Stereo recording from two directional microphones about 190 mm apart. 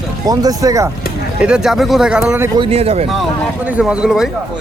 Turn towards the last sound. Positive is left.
turn(degrees=0)  # may be behind; listen again after turning